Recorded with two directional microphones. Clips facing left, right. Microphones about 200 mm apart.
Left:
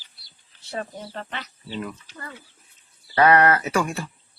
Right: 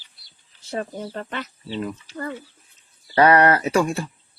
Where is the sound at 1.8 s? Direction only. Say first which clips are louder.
Right 4 dB; 35° right (ahead or behind).